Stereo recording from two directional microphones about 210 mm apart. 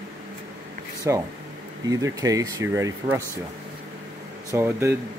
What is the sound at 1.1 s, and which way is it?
Speech, 10° right (ahead or behind).